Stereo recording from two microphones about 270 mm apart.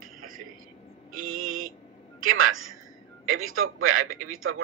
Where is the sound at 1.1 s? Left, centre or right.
Right.